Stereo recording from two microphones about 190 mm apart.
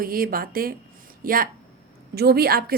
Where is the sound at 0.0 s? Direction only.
50° right (ahead or behind).